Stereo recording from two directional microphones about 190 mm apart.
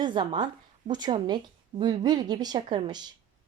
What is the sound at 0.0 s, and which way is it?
A woman's voice, 25° right (ahead or behind).